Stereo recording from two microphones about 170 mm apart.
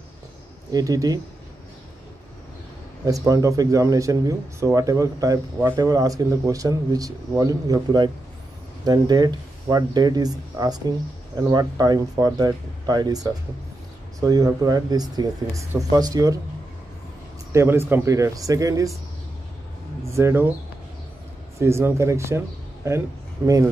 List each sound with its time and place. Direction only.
0.7 s speech: 20° right (ahead or behind)
3.1 s speech: 20° right (ahead or behind)
17.5 s speech: 15° right (ahead or behind)
20.1 s speech: 15° right (ahead or behind)
21.5 s speech: 15° right (ahead or behind)